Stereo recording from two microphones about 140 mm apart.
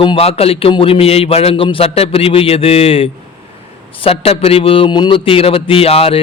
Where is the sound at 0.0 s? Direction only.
40° left (ahead or behind).